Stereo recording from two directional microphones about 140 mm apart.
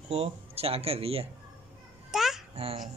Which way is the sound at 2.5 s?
45° right (ahead or behind).